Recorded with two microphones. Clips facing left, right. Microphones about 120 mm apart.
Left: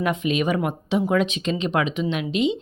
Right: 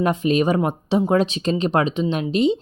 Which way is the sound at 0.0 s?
35° right (ahead or behind).